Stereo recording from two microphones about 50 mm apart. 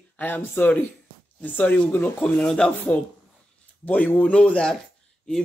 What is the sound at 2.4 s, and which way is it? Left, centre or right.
Speech, centre.